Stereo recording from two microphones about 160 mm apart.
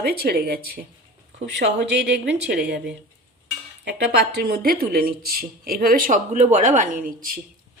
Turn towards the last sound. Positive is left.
turn(degrees=-60)  # may be behind; listen again after turning